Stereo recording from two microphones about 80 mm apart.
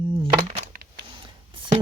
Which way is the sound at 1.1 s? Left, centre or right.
Right.